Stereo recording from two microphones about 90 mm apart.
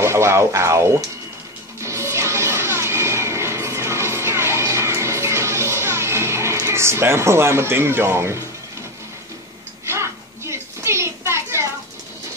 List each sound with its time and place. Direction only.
0.0 s speech: 30° right (ahead or behind)
1.8 s vehicle: 30° right (ahead or behind)
6.6 s speech: 30° right (ahead or behind)
9.8 s a sound: 30° right (ahead or behind)